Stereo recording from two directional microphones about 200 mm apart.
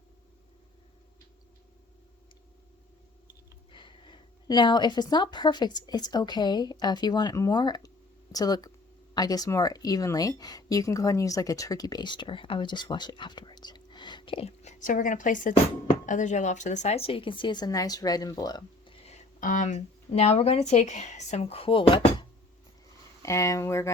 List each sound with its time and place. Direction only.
3.7 s a woman's voice: 25° left (ahead or behind)
23.2 s speech: 15° left (ahead or behind)